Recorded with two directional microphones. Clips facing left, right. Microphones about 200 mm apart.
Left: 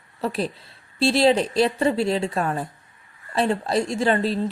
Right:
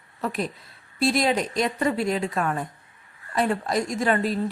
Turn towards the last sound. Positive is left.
turn(degrees=30)  # may be behind; listen again after turning